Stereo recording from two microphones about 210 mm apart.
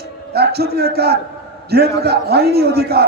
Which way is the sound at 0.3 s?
50° right (ahead or behind).